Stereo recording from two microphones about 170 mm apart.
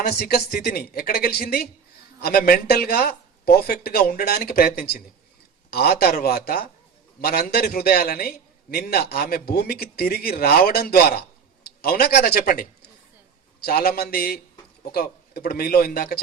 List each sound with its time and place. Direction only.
0.0 s a man's voice: 70° left (ahead or behind)